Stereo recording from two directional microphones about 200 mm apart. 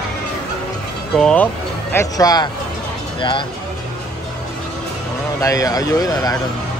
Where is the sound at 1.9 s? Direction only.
15° left (ahead or behind).